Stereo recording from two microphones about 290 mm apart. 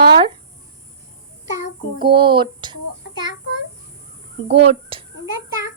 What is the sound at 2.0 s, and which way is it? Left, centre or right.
Child singing, centre.